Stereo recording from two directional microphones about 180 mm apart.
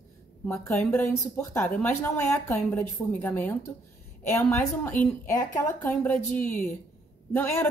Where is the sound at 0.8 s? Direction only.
10° left (ahead or behind).